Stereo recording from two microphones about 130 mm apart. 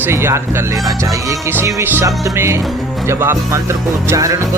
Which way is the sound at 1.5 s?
15° right (ahead or behind).